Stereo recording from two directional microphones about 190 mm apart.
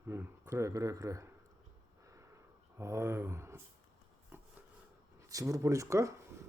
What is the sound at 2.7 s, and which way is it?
Speech, 15° right (ahead or behind).